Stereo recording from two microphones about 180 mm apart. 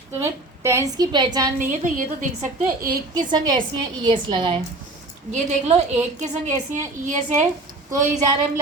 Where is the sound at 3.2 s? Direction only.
25° right (ahead or behind).